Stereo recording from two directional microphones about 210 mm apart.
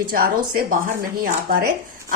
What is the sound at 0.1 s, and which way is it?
A woman's voice, 45° right (ahead or behind).